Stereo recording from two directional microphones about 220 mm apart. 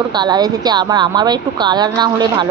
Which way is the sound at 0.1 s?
20° right (ahead or behind).